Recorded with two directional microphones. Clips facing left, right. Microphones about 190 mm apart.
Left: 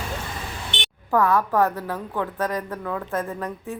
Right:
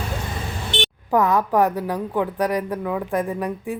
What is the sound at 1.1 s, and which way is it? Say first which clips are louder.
A woman's voice: right 2 dB; 20° right (ahead or behind).